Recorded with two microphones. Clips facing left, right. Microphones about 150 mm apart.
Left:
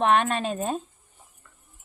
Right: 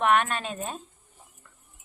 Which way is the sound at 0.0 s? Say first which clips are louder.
Left 2 dB; 30° left (ahead or behind).